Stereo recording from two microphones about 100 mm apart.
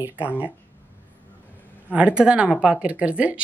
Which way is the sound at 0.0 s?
15° right (ahead or behind).